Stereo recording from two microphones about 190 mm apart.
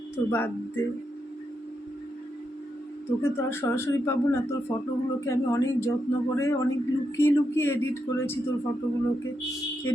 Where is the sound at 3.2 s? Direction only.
10° left (ahead or behind).